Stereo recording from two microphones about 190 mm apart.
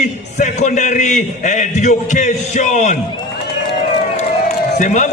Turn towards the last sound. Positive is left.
turn(degrees=40)  # may be behind; listen again after turning